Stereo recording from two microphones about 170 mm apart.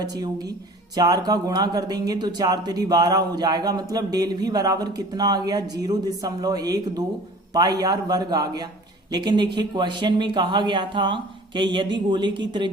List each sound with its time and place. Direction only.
0.0 s speech: 25° right (ahead or behind)